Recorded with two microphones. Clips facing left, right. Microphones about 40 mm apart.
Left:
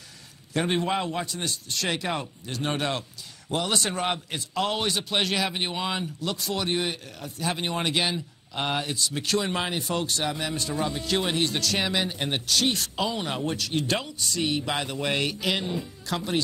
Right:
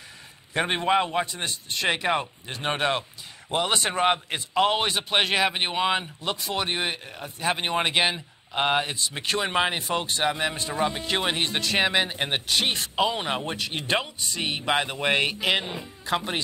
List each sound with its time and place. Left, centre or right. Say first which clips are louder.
0.5 s a man's voice: right 2 dB; right